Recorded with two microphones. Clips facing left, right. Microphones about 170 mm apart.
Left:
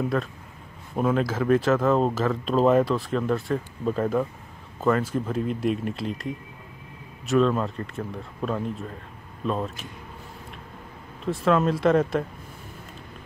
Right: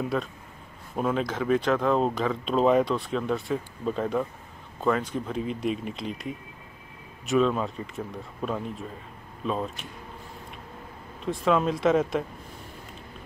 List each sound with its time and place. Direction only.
0.0 s speech: centre (ahead or behind)
11.2 s speech: centre (ahead or behind)